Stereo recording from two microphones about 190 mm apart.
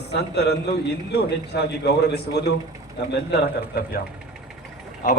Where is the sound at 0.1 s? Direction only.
60° left (ahead or behind).